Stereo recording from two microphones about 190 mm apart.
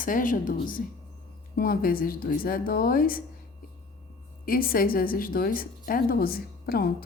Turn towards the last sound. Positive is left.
turn(degrees=55)  # may be behind; listen again after turning